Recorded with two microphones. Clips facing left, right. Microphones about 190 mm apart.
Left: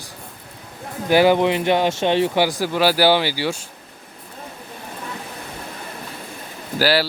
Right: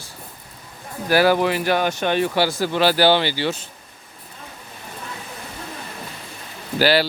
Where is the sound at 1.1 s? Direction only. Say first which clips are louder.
Left 2 dB; 20° left (ahead or behind).